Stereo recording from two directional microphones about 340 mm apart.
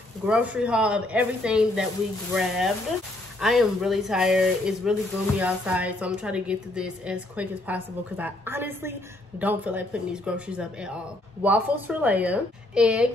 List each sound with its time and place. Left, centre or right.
0.3 s a woman's voice: centre